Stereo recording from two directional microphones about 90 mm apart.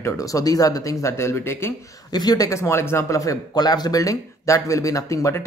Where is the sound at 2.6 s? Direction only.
30° left (ahead or behind).